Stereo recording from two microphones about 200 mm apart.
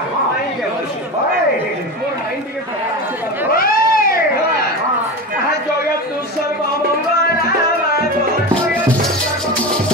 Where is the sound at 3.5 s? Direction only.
45° left (ahead or behind).